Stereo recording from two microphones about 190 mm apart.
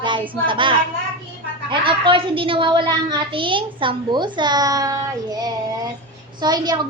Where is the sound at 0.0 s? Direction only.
25° right (ahead or behind).